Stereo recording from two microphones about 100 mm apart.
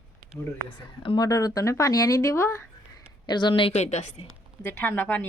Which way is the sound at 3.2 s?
45° left (ahead or behind).